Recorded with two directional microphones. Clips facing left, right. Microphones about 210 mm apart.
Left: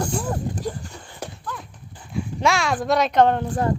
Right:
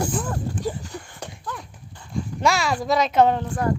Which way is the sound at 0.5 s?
15° left (ahead or behind).